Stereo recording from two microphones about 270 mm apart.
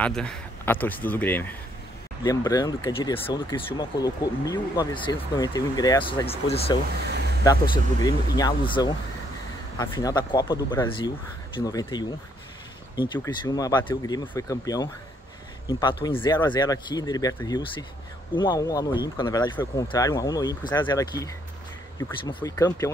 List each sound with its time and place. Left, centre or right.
0.0 s speech: centre; by 6.8 s left
7.1 s a sound: right
7.4 s speech: centre
13.1 s speech: centre